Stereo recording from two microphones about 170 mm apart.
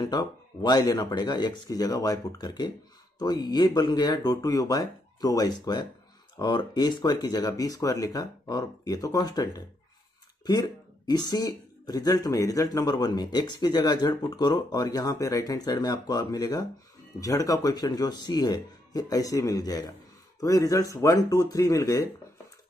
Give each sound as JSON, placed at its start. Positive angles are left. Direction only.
{"t": 0.0, "sound": "speech", "side_deg": 25}